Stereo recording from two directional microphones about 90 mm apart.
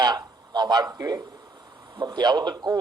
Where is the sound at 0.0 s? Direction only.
50° right (ahead or behind).